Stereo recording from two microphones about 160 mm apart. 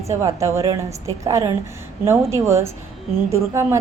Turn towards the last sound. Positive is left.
turn(degrees=-15)  # may be behind; listen again after turning